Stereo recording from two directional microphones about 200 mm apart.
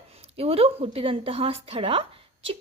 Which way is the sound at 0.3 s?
30° right (ahead or behind).